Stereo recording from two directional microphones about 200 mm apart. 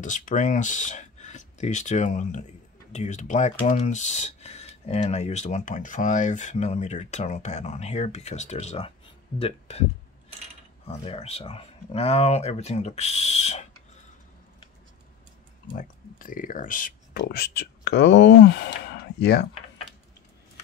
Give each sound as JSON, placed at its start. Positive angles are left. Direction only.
{"t": 0.0, "sound": "speech", "side_deg": 40}
{"t": 10.9, "sound": "speech", "side_deg": 30}
{"t": 15.7, "sound": "speech", "side_deg": 45}
{"t": 17.2, "sound": "speech", "side_deg": 55}